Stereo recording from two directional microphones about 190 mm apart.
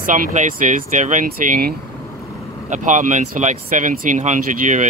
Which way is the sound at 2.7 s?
40° right (ahead or behind).